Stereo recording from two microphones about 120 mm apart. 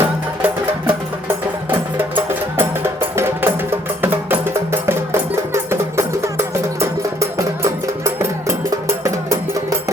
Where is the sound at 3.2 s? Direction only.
20° right (ahead or behind).